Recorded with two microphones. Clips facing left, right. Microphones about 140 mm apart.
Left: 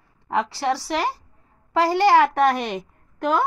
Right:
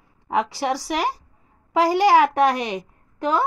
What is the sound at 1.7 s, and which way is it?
A woman's voice, 10° right (ahead or behind).